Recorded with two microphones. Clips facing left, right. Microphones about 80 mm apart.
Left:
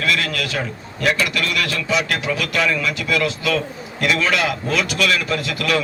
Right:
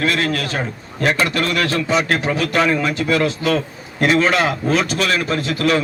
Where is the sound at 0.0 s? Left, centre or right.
Right.